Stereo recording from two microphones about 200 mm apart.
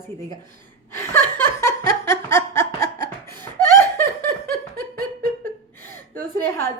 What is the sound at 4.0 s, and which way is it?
Snicker, 10° left (ahead or behind).